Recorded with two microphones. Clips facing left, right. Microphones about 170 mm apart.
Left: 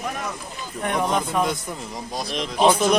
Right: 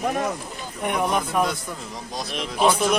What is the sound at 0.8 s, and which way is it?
Speech, 10° right (ahead or behind).